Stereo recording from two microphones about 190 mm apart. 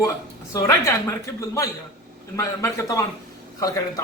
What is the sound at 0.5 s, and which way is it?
A woman's voice, 20° left (ahead or behind).